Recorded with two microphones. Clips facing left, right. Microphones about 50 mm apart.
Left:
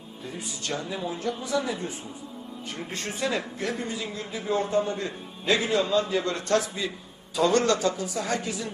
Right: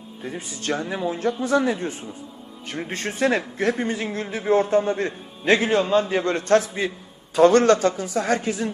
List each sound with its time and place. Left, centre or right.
0.2 s a man's voice: right